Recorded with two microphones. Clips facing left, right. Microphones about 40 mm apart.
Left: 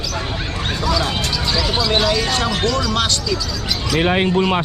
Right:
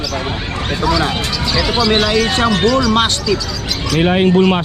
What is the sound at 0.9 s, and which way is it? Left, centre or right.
Speech, centre.